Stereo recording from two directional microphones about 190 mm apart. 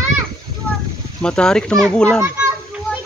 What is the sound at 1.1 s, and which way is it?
Speech, 5° left (ahead or behind).